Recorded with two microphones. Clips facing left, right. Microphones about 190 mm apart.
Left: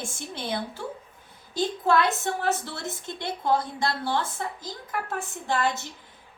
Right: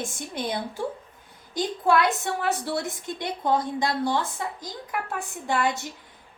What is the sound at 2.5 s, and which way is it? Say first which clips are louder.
A woman's voice: right 3 dB; 15° right (ahead or behind).